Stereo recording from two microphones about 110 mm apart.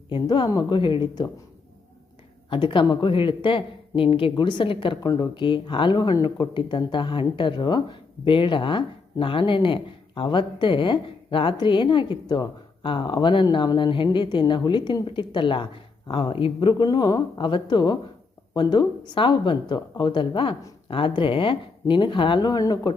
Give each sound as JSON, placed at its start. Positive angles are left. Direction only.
{"t": 0.1, "sound": "speech", "side_deg": 45}
{"t": 2.5, "sound": "speech", "side_deg": 50}
{"t": 5.0, "sound": "speech", "side_deg": 40}